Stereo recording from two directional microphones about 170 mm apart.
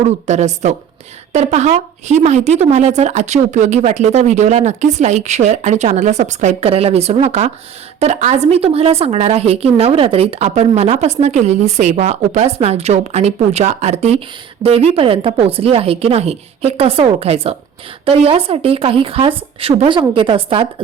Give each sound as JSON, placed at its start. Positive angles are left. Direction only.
{"t": 0.0, "sound": "a woman's voice", "side_deg": -40}